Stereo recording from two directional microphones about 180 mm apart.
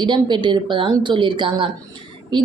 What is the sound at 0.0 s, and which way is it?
Speech, 25° right (ahead or behind).